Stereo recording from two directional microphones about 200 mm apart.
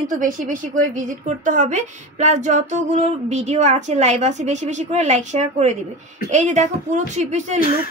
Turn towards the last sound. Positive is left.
turn(degrees=-35)  # may be behind; listen again after turning